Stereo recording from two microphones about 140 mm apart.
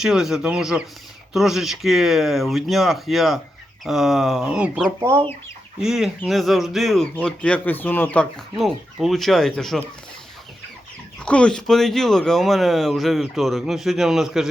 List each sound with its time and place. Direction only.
0.0 s speech: 5° right (ahead or behind)
4.9 s speech: 20° right (ahead or behind)
5.8 s speech: 5° right (ahead or behind)
11.2 s speech: 5° left (ahead or behind)